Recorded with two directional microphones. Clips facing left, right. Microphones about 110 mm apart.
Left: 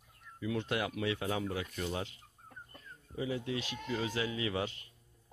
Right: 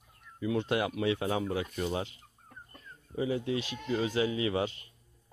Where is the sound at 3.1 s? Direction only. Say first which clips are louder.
Right 5 dB; 30° right (ahead or behind).